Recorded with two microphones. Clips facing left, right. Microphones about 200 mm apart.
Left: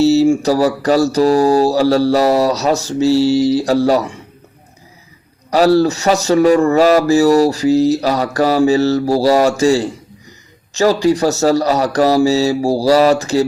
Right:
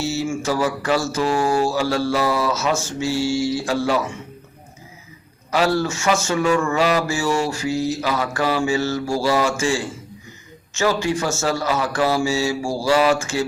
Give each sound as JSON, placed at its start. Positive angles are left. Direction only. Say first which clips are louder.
{"t": 0.0, "sound": "speech", "louder": "left 12 dB", "side_deg": 35}
{"t": 5.5, "sound": "speech", "louder": "left 8 dB", "side_deg": 40}